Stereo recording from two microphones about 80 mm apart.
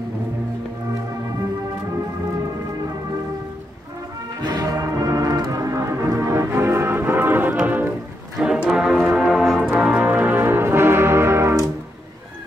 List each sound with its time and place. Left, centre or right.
4.4 s music: right
8.4 s music: centre
9.7 s brass instrument: centre; by 11.7 s right